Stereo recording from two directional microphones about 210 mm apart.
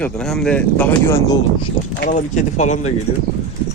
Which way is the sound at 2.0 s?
35° left (ahead or behind).